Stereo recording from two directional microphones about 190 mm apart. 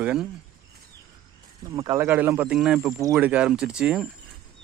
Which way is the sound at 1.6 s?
20° right (ahead or behind).